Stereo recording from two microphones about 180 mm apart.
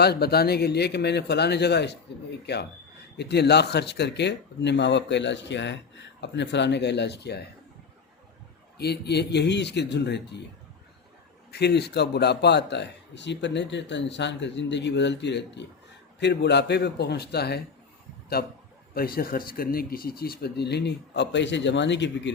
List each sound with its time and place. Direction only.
0.0 s speech: 60° left (ahead or behind)
8.8 s speech: 65° left (ahead or behind)
11.5 s speech: 65° left (ahead or behind)